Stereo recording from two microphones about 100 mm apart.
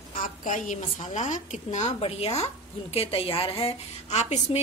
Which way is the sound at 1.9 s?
85° left.